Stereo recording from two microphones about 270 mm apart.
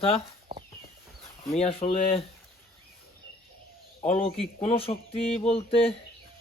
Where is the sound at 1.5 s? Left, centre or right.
Left.